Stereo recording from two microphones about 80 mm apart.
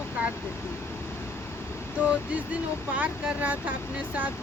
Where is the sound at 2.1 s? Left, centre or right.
Centre.